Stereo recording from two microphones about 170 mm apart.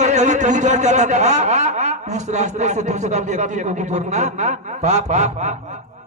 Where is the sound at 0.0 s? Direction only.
45° right (ahead or behind).